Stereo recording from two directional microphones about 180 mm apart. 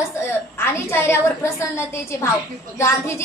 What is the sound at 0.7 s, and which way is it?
Speech, 15° left (ahead or behind).